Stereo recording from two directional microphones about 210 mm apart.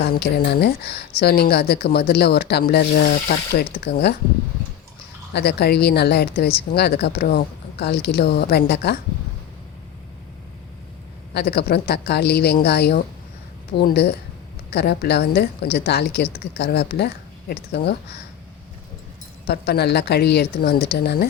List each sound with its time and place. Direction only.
0.0 s speech: 50° left (ahead or behind)
5.3 s speech: 50° left (ahead or behind)
11.3 s speech: 50° left (ahead or behind)
19.5 s speech: 50° left (ahead or behind)